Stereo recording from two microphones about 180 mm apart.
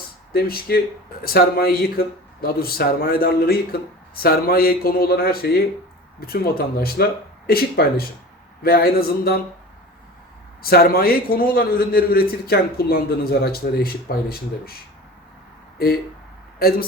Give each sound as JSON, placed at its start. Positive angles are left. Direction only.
{"t": 0.3, "sound": "speech", "side_deg": 60}
{"t": 10.7, "sound": "speech", "side_deg": 55}
{"t": 16.6, "sound": "speech", "side_deg": 55}